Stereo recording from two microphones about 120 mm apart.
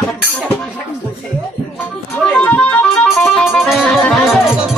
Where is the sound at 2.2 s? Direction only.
10° left (ahead or behind).